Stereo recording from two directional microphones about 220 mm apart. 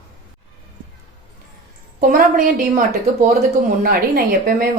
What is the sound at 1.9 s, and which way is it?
A woman's voice, 40° right (ahead or behind).